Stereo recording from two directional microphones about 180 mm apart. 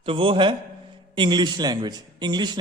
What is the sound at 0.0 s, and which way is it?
A man's voice, 30° right (ahead or behind).